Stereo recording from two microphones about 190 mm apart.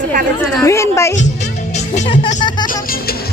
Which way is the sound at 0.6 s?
15° left (ahead or behind).